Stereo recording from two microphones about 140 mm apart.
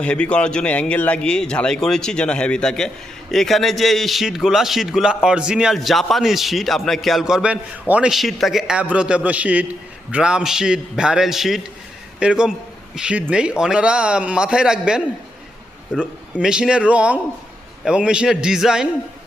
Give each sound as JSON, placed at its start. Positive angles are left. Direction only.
{"t": 0.0, "sound": "a man's voice", "side_deg": 5}